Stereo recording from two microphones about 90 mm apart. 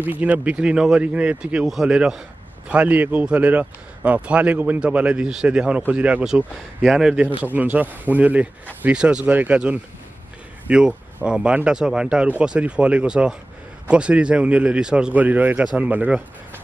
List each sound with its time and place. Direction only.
0.0 s speech: 15° right (ahead or behind)
7.5 s speech: 20° right (ahead or behind)